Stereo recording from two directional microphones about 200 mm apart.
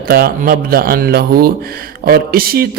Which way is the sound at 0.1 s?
45° right (ahead or behind).